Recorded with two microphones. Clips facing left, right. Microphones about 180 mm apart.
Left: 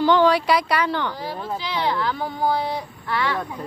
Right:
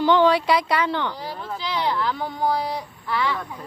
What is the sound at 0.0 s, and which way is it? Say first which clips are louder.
A woman's voice: even; 20° right (ahead or behind).